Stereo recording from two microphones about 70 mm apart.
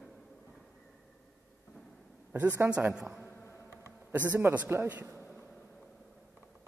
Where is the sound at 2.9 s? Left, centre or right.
Centre.